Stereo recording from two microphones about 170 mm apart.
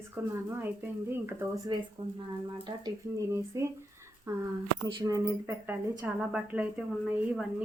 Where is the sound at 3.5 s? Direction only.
15° right (ahead or behind).